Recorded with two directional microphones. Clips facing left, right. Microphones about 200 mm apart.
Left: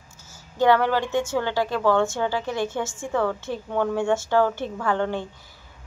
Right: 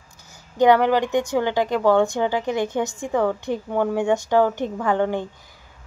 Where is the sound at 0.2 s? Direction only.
15° right (ahead or behind).